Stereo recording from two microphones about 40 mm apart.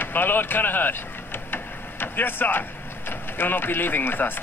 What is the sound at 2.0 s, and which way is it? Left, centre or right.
Speech, left.